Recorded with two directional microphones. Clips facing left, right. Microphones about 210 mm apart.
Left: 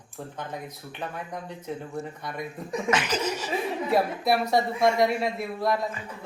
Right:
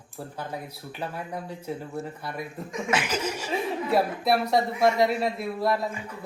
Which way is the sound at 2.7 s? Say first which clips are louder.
Left 6 dB; 35° left (ahead or behind).